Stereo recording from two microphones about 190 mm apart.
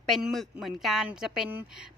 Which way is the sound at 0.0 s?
Centre (ahead or behind).